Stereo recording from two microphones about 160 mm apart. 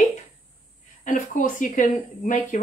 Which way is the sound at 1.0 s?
55° left (ahead or behind).